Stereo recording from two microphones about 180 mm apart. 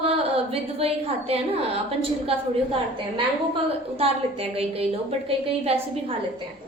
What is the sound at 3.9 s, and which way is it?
A woman's voice, 35° right (ahead or behind).